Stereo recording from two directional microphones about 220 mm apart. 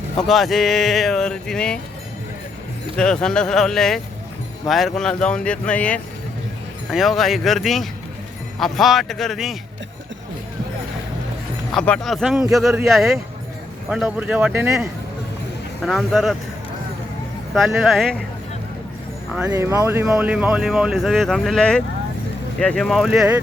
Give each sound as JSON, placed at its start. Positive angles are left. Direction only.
{"t": 0.2, "sound": "speech", "side_deg": 0}
{"t": 2.9, "sound": "speech", "side_deg": 5}
{"t": 11.7, "sound": "speech", "side_deg": 5}
{"t": 17.5, "sound": "speech", "side_deg": 0}
{"t": 19.5, "sound": "speech", "side_deg": -15}